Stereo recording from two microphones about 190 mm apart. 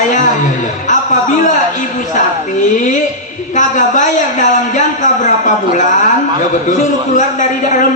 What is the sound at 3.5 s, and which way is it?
A man's voice, 40° left (ahead or behind).